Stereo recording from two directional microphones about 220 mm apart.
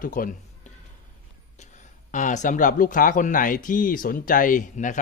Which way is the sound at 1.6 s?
35° left (ahead or behind).